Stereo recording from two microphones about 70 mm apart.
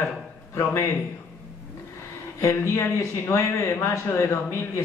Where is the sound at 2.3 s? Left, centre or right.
Left.